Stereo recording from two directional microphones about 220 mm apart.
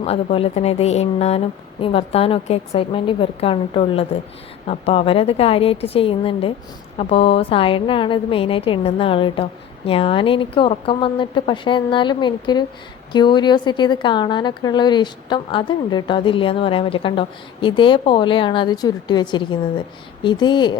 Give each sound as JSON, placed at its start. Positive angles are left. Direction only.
{"t": 0.0, "sound": "a woman's voice", "side_deg": 25}